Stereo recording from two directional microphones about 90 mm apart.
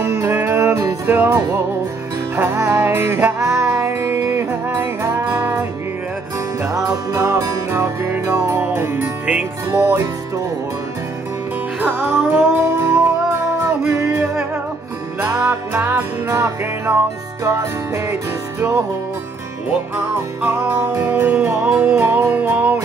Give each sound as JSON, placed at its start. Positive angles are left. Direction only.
{"t": 0.4, "sound": "music", "side_deg": -30}
{"t": 6.6, "sound": "music", "side_deg": -35}
{"t": 11.8, "sound": "music", "side_deg": -20}
{"t": 20.4, "sound": "music", "side_deg": -25}